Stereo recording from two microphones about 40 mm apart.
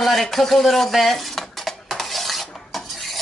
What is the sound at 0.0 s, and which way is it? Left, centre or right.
Stir, centre.